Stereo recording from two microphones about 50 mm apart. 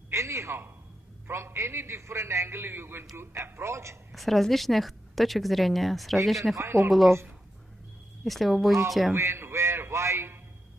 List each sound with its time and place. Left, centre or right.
0.1 s a sound: right
1.2 s a man's voice: right
3.5 s a man's voice: right
4.1 s a woman's voice: centre
6.5 s a man's voice: right
6.9 s a woman's voice: centre
8.2 s a woman's voice: centre
9.1 s radio: right